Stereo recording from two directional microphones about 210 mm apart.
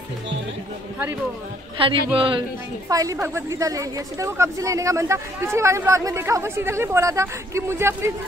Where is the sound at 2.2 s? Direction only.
25° right (ahead or behind).